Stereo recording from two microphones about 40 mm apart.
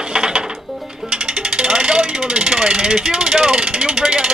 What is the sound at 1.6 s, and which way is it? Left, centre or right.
Speech, right.